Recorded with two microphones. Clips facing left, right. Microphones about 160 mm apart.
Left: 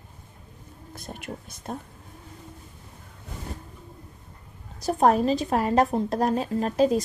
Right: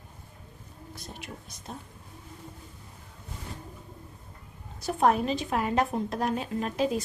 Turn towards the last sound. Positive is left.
turn(degrees=40)  # may be behind; listen again after turning